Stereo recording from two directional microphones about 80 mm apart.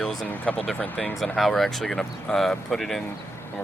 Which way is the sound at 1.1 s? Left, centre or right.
Centre.